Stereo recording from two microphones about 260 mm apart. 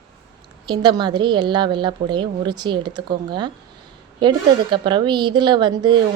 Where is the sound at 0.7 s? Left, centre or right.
Centre.